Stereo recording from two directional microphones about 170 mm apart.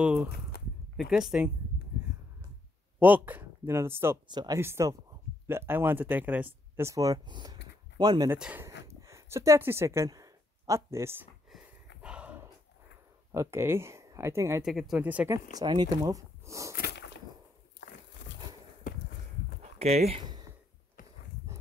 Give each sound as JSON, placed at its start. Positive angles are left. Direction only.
{"t": 0.0, "sound": "speech", "side_deg": -5}
{"t": 3.0, "sound": "speech", "side_deg": -10}
{"t": 4.3, "sound": "speech", "side_deg": -25}
{"t": 8.3, "sound": "speech", "side_deg": -10}
{"t": 12.0, "sound": "dog", "side_deg": -5}
{"t": 13.3, "sound": "speech", "side_deg": -15}
{"t": 14.6, "sound": "speech", "side_deg": 0}
{"t": 15.5, "sound": "speech", "side_deg": -25}
{"t": 16.7, "sound": "a sound", "side_deg": 70}
{"t": 18.9, "sound": "walk", "side_deg": 55}
{"t": 19.8, "sound": "speech", "side_deg": -40}